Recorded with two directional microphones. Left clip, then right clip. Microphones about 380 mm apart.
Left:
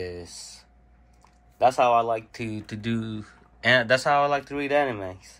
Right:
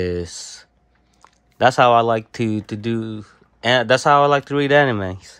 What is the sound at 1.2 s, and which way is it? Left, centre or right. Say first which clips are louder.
Speech: right 5 dB; right.